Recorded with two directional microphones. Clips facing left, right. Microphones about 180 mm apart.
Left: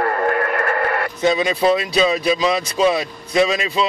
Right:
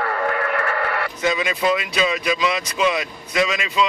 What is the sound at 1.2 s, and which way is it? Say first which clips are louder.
Speech: left 5 dB; 30° left (ahead or behind).